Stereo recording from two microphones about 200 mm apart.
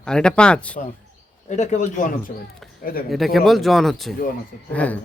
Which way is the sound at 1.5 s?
35° left (ahead or behind).